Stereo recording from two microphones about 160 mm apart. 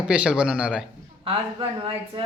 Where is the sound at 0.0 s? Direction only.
5° right (ahead or behind).